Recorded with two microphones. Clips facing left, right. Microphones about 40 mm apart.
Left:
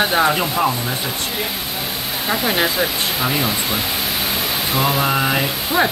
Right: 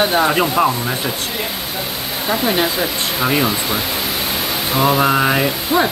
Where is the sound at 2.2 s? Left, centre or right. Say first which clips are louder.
Right 2 dB; centre.